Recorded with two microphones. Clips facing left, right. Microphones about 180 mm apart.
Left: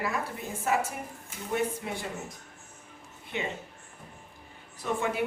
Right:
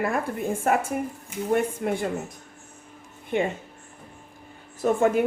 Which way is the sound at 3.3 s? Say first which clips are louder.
Right 10 dB; 50° right (ahead or behind).